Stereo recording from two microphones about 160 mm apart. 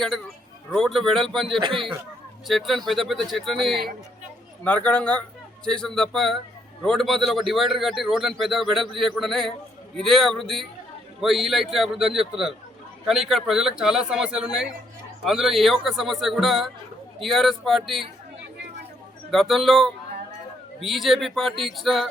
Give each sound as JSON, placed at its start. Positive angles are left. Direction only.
{"t": 0.7, "sound": "a man's voice", "side_deg": 0}
{"t": 1.6, "sound": "speech", "side_deg": -30}
{"t": 2.5, "sound": "a man's voice", "side_deg": 0}
{"t": 19.3, "sound": "a man's voice", "side_deg": 0}